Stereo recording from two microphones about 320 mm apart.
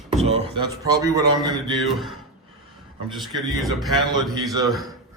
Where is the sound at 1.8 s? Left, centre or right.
Centre.